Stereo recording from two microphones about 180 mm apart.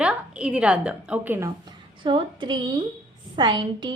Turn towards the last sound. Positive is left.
turn(degrees=-25)  # may be behind; listen again after turning